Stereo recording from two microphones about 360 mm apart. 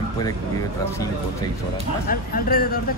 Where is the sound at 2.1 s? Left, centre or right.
Left.